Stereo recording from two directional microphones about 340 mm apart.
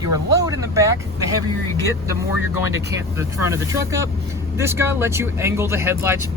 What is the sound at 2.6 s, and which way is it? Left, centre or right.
Speech, centre.